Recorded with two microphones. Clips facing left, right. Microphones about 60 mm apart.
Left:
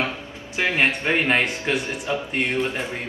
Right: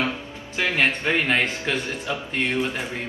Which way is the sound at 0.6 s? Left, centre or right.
Left.